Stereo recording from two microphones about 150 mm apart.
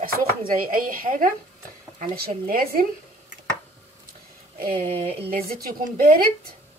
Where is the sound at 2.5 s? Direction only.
75° right (ahead or behind).